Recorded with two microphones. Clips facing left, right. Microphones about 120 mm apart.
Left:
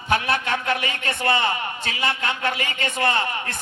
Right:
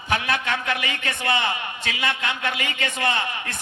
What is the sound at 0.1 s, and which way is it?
Speech, 35° left (ahead or behind).